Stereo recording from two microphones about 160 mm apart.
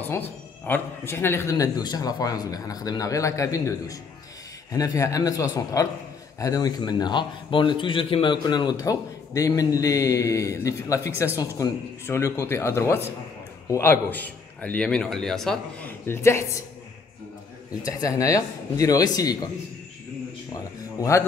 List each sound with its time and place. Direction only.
0.0 s a man's voice: 10° left (ahead or behind)
16.1 s speech: 15° left (ahead or behind)
17.8 s a man's voice: 20° left (ahead or behind)
21.0 s speech: 20° left (ahead or behind)